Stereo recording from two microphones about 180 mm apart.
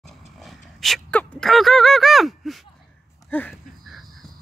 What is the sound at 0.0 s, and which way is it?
Gasp, centre (ahead or behind).